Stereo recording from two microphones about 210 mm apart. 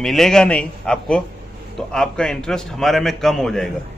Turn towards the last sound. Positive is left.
turn(degrees=0)  # may be behind; listen again after turning